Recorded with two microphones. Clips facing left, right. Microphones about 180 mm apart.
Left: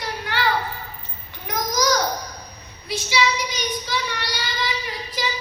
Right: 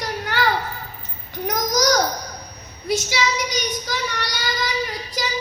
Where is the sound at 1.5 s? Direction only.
40° right (ahead or behind).